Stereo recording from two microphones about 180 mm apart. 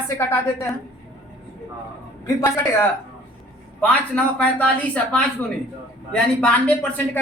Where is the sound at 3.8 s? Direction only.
5° left (ahead or behind).